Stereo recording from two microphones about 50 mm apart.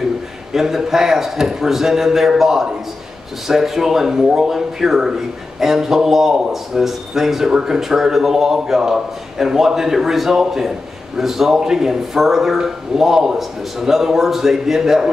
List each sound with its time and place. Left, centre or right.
0.5 s a man's voice: centre